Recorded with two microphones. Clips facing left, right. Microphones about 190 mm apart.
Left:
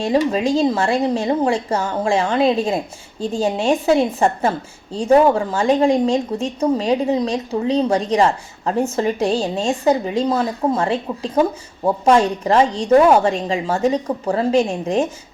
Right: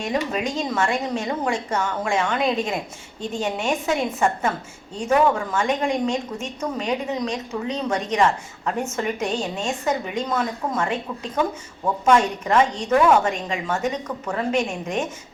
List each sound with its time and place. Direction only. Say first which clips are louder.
0.0 s speech: left 7 dB; 30° left (ahead or behind)